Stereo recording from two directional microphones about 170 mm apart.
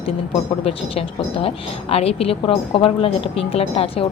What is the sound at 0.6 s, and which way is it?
Speech, 35° left (ahead or behind).